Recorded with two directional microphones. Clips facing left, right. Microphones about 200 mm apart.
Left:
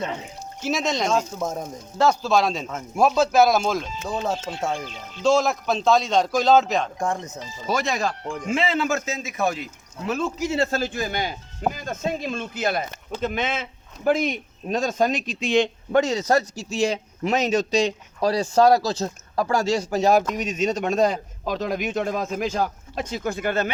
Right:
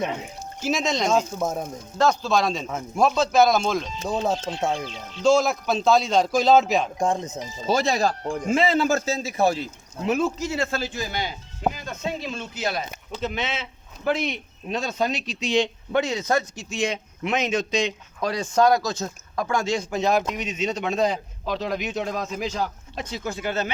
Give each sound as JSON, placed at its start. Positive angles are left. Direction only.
{"t": 0.6, "sound": "speech", "side_deg": 0}
{"t": 2.0, "sound": "speech", "side_deg": 5}
{"t": 7.0, "sound": "speech", "side_deg": -20}
{"t": 10.7, "sound": "a man's voice", "side_deg": 50}